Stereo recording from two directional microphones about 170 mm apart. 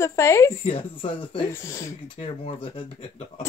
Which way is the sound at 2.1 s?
30° left (ahead or behind).